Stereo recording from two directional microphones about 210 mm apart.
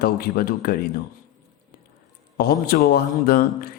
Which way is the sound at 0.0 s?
45° left (ahead or behind).